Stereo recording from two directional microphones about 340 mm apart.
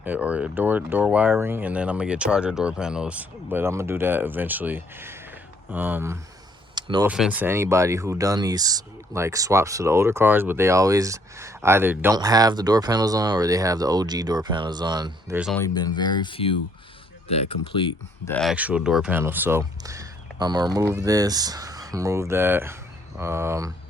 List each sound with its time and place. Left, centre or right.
0.0 s speech: centre
18.3 s speech: centre